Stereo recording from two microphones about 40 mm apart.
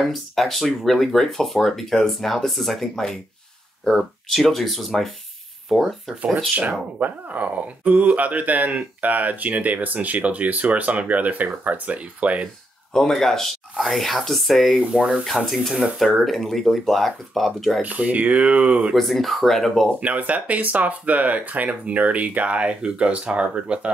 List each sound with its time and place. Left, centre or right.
0.0 s speech: centre
6.5 s speech: right
12.9 s speech: centre
15.0 s speech: right
15.5 s speech: centre
16.0 s speech: centre
17.8 s speech: right
18.9 s speech: centre
20.0 s speech: right